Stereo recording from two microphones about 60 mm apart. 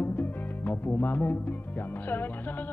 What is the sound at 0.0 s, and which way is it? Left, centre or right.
Music, left.